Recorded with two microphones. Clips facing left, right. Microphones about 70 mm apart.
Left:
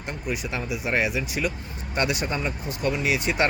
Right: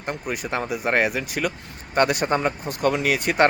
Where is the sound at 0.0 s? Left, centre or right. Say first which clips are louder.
Right 2 dB; right.